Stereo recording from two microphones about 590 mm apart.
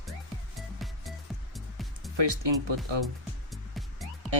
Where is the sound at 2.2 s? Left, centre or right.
Right.